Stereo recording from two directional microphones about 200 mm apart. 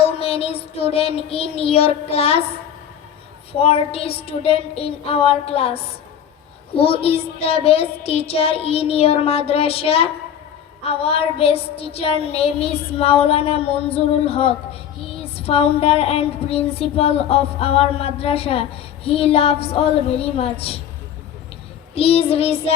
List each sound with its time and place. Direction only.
0.0 s child singing: 30° left (ahead or behind)
3.5 s child singing: 30° left (ahead or behind)
21.9 s child singing: 30° left (ahead or behind)